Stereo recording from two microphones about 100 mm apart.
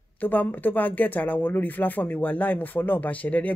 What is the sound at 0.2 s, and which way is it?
Speech, 15° left (ahead or behind).